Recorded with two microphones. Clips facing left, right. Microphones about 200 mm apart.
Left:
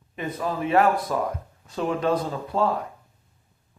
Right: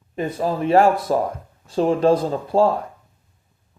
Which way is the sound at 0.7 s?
30° right (ahead or behind).